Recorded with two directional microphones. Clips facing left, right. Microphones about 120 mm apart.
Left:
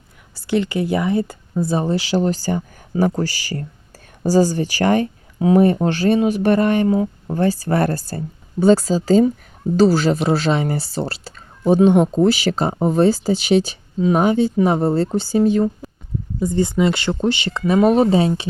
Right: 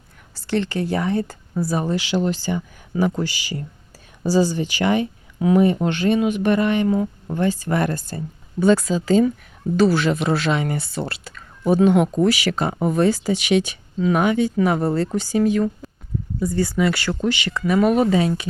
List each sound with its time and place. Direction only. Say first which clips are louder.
0.3 s speech: left 3 dB; 15° left (ahead or behind)
1.6 s speech: left 3 dB; 30° left (ahead or behind)